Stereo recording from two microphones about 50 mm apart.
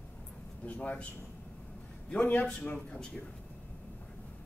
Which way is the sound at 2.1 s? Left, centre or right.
Left.